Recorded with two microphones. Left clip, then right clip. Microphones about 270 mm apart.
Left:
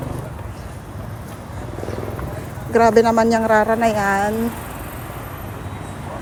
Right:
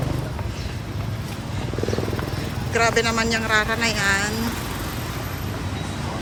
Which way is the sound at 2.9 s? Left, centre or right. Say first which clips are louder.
Left 7 dB; centre.